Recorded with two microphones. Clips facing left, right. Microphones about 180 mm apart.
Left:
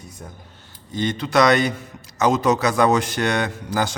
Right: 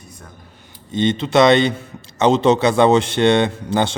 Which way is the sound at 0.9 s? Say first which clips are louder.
Right 5 dB; 25° right (ahead or behind).